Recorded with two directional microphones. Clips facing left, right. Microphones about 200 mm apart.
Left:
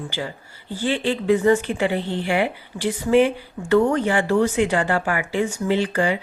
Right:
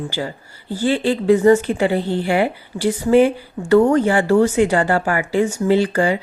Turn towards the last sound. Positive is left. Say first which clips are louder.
# right 4 dB
turn(degrees=-40)  # may be behind; listen again after turning